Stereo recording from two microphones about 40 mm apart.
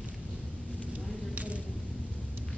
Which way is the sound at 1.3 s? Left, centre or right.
Right.